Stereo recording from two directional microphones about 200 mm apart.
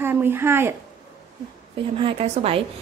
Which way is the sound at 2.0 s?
30° right (ahead or behind).